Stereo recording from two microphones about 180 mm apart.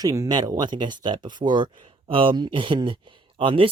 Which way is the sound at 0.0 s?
20° right (ahead or behind).